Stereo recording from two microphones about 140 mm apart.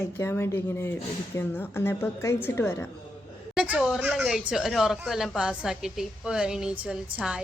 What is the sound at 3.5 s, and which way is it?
A woman's voice, 10° right (ahead or behind).